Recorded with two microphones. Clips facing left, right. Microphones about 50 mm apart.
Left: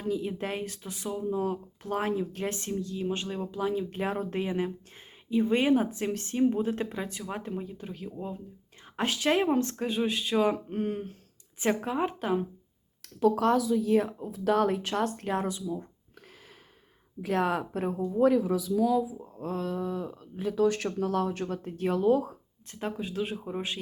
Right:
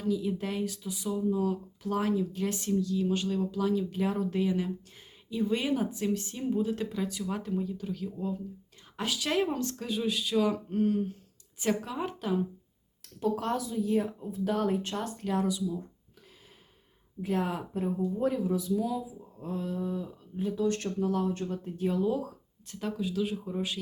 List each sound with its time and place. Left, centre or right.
0.0 s speech: left
3.8 s speech: left
9.0 s speech: left
13.0 s speech: left
15.0 s speech: left
15.3 s speech: left
17.2 s speech: left
18.9 s speech: left
22.2 s speech: left